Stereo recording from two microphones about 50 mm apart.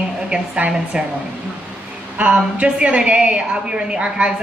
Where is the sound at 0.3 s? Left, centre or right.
Centre.